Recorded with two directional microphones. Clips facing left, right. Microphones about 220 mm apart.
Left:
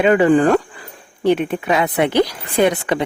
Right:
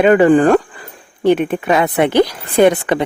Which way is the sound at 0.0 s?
50° right (ahead or behind).